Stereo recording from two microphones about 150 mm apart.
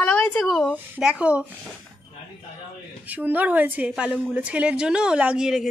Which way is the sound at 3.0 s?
10° right (ahead or behind).